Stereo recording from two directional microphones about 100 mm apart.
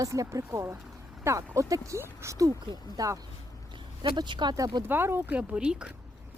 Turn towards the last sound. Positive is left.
turn(degrees=-10)  # may be behind; listen again after turning